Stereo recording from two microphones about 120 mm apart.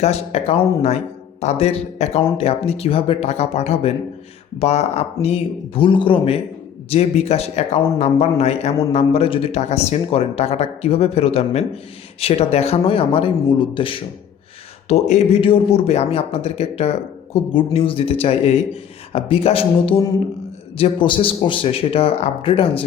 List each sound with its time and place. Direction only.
0.0 s speech: 60° left (ahead or behind)
5.2 s a man's voice: 50° left (ahead or behind)
14.8 s speech: 65° left (ahead or behind)
15.4 s a man's voice: 50° left (ahead or behind)